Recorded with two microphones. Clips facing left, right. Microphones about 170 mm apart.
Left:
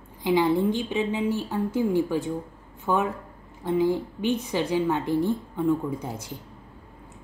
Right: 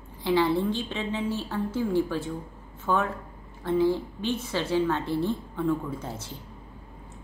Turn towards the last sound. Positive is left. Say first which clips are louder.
# left 4 dB
turn(degrees=15)  # may be behind; listen again after turning